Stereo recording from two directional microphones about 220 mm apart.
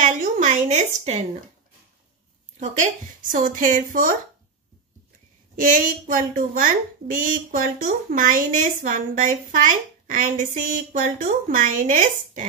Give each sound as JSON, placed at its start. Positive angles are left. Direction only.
{"t": 0.0, "sound": "a sound", "side_deg": -35}
{"t": 2.6, "sound": "a woman's voice", "side_deg": -35}
{"t": 5.6, "sound": "a woman's voice", "side_deg": -35}